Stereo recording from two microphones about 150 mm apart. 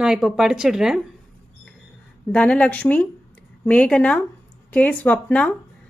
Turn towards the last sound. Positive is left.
turn(degrees=10)  # may be behind; listen again after turning